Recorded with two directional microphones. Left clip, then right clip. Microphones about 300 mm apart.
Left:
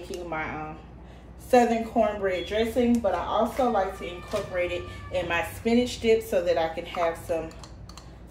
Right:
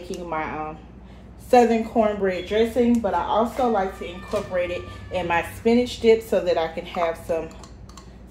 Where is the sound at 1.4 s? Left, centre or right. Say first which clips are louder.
Right 4 dB; centre.